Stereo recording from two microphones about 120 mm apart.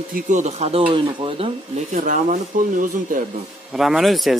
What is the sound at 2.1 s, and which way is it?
Speech, 90° right.